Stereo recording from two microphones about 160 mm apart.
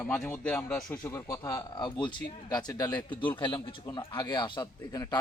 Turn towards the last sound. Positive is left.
turn(degrees=25)  # may be behind; listen again after turning